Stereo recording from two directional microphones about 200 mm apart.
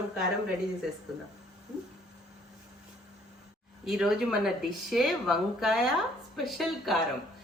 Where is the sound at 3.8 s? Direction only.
5° right (ahead or behind).